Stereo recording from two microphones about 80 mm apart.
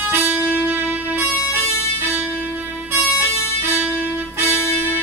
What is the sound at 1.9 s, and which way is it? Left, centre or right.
Music, right.